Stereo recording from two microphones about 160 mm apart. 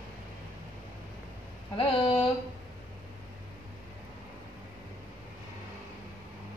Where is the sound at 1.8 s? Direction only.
35° left (ahead or behind).